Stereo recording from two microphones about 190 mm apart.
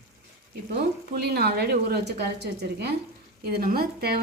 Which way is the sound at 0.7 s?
55° right (ahead or behind).